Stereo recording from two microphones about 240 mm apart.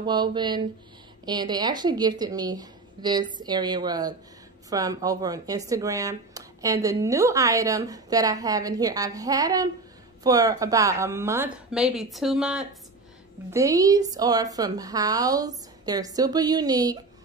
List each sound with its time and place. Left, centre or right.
0.0 s speech: centre
13.5 s speech: centre